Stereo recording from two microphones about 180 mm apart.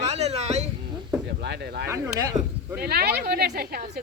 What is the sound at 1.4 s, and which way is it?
Speech, 65° right (ahead or behind).